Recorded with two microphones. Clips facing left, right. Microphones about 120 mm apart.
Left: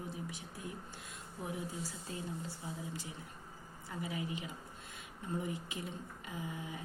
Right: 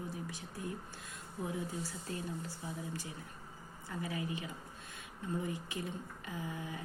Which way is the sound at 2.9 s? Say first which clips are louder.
Right 1 dB; 20° left (ahead or behind).